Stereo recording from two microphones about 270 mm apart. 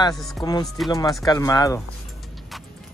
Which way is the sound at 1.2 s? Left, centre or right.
Centre.